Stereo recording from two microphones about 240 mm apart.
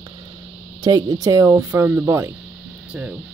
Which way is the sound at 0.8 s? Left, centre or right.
Centre.